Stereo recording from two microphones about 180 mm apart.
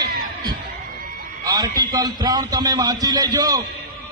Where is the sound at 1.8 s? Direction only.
20° right (ahead or behind).